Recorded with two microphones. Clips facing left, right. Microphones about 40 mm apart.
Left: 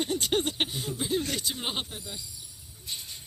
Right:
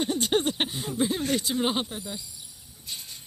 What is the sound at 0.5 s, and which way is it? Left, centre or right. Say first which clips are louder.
Speech: right 1 dB; centre.